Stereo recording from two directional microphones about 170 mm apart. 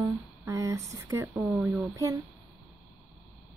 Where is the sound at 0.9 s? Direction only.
15° right (ahead or behind).